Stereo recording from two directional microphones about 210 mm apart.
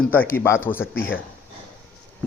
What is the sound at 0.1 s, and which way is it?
A man's voice, 10° left (ahead or behind).